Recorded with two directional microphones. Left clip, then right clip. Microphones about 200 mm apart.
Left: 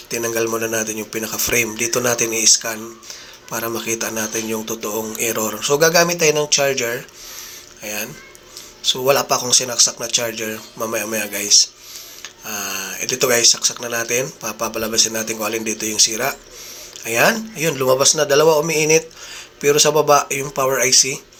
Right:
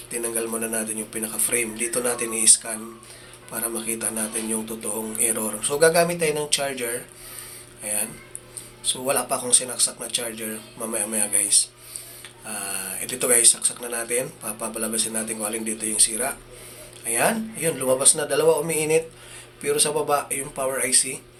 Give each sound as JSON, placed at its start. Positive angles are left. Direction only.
{"t": 0.1, "sound": "speech", "side_deg": 30}